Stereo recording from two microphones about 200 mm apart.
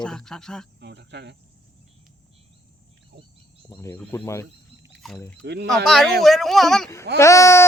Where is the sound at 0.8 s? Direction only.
60° right (ahead or behind).